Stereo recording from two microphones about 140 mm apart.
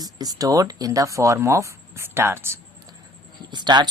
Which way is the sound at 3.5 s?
30° right (ahead or behind).